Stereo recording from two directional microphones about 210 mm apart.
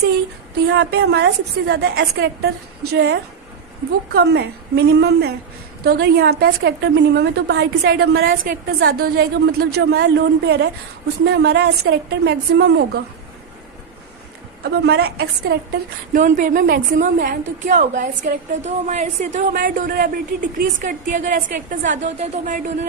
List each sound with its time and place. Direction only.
0.7 s a woman's voice: 50° right (ahead or behind)
14.6 s a woman's voice: 50° right (ahead or behind)
16.1 s a woman's voice: 40° right (ahead or behind)